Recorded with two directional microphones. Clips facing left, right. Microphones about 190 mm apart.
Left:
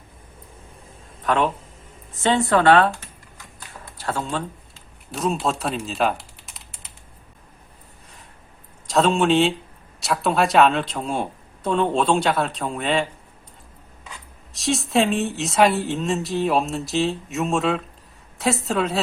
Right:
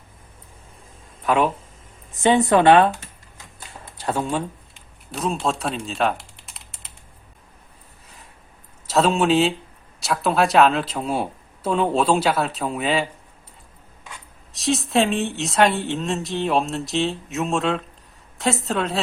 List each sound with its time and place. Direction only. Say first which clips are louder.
1.2 s speech: right 1 dB; 10° right (ahead or behind)
3.9 s speech: right 3 dB; 20° right (ahead or behind)
5.1 s speech: left 1 dB; centre (ahead or behind)
8.9 s speech: even; 5° right (ahead or behind)
14.5 s speech: even; centre (ahead or behind)